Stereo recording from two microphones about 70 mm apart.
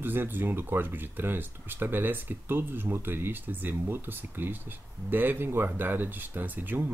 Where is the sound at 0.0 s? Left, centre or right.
Right.